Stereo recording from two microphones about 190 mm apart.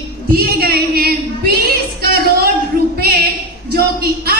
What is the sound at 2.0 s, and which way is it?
Music, 55° right (ahead or behind).